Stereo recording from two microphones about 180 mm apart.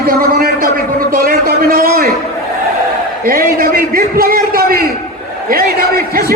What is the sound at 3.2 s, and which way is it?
A man's voice, 50° right (ahead or behind).